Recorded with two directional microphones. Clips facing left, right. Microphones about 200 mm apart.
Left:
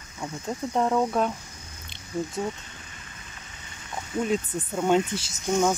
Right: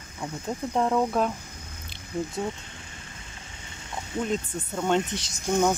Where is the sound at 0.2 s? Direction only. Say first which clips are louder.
Even; centre (ahead or behind).